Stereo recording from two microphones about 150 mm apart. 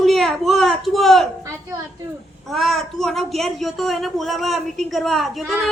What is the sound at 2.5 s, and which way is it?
Speech, centre (ahead or behind).